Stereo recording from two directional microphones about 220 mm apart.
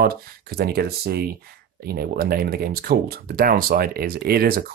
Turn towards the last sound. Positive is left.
turn(degrees=-45)  # may be behind; listen again after turning